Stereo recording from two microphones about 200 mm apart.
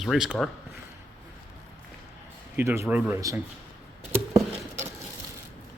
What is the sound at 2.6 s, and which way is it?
Speech, 15° right (ahead or behind).